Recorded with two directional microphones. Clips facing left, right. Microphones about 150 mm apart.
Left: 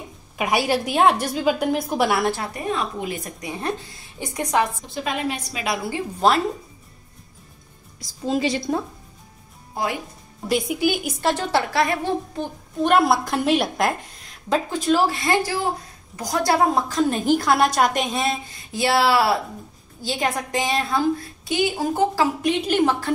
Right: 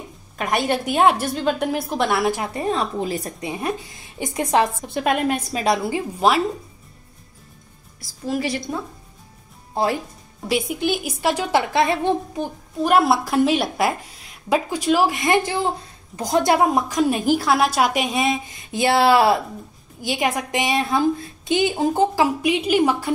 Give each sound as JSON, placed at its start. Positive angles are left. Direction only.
{"t": 0.4, "sound": "a woman's voice", "side_deg": 5}
{"t": 2.3, "sound": "a woman's voice", "side_deg": -20}
{"t": 2.6, "sound": "a woman's voice", "side_deg": -35}
{"t": 3.4, "sound": "a woman's voice", "side_deg": -15}
{"t": 4.8, "sound": "a woman's voice", "side_deg": -60}
{"t": 5.5, "sound": "a woman's voice", "side_deg": -35}
{"t": 5.9, "sound": "a woman's voice", "side_deg": -15}
{"t": 8.0, "sound": "a woman's voice", "side_deg": 20}
{"t": 10.5, "sound": "a woman's voice", "side_deg": 0}
{"t": 11.1, "sound": "a woman's voice", "side_deg": -10}
{"t": 12.8, "sound": "a woman's voice", "side_deg": -5}